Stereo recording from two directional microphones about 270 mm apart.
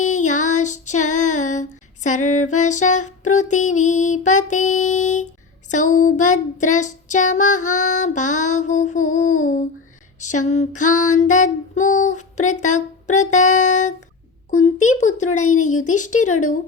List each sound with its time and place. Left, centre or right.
0.0 s female singing: left